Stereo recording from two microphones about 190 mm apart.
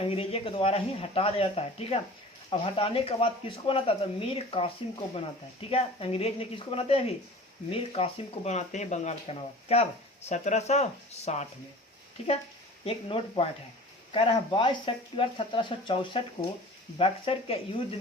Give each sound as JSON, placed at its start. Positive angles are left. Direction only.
{"t": 0.0, "sound": "speech", "side_deg": 30}
{"t": 12.8, "sound": "speech", "side_deg": 30}